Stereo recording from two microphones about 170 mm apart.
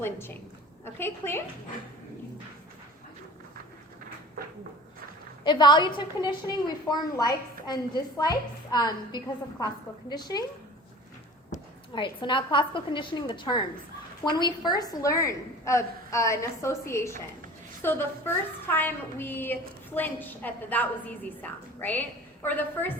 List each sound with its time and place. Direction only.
0.0 s a woman's voice: 15° left (ahead or behind)
5.4 s a woman's voice: 25° left (ahead or behind)
11.5 s a sound: 50° left (ahead or behind)
11.9 s a woman's voice: 30° left (ahead or behind); by 22.9 s 10° left (ahead or behind)